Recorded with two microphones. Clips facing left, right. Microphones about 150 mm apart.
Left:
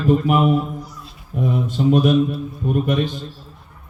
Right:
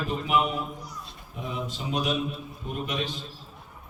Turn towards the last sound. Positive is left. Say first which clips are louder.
# left 11 dB
turn(degrees=50)  # may be behind; listen again after turning